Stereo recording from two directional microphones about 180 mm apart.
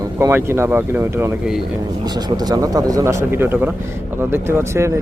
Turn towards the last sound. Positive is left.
turn(degrees=-15)  # may be behind; listen again after turning